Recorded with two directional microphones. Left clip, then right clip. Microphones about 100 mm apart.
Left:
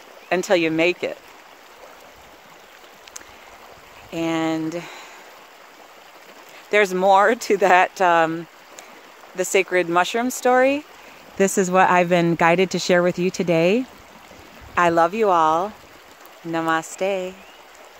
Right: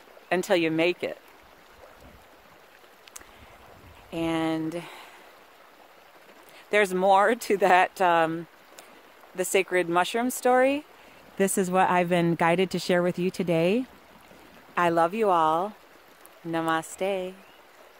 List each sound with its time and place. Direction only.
0.3 s speech: 25° right (ahead or behind)
4.1 s speech: 20° right (ahead or behind)
6.7 s speech: 20° right (ahead or behind)